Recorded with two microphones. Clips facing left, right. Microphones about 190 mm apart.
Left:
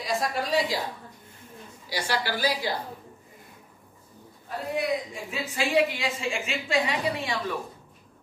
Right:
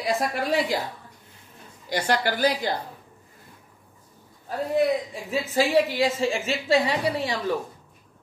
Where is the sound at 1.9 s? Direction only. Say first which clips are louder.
Right 5 dB; 55° right (ahead or behind).